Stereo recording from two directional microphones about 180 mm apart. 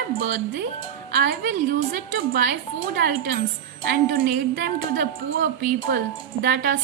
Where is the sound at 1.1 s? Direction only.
55° right (ahead or behind).